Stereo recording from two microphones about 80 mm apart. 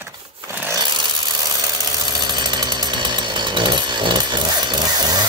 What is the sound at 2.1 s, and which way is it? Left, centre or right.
Chainsaw, right.